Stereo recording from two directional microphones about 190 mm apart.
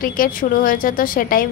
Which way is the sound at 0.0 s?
45° left (ahead or behind).